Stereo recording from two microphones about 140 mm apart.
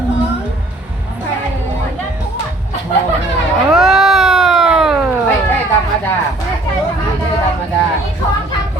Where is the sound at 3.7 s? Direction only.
5° right (ahead or behind).